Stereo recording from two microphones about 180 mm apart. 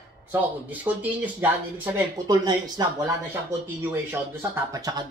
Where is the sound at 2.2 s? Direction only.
20° right (ahead or behind).